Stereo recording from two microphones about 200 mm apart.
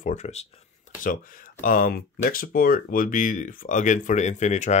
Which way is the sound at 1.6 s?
45° left (ahead or behind).